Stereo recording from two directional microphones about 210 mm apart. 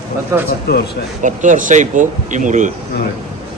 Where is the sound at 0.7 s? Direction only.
50° left (ahead or behind).